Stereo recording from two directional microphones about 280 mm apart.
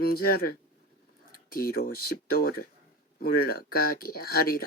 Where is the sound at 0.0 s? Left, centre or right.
Left.